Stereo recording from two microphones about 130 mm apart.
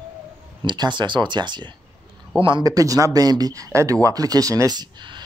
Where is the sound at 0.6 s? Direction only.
35° right (ahead or behind).